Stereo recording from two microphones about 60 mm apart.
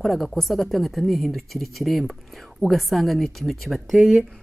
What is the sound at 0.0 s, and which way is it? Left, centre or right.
Speech, centre.